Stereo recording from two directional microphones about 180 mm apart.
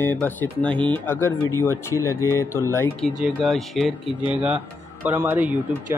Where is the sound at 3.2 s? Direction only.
Centre (ahead or behind).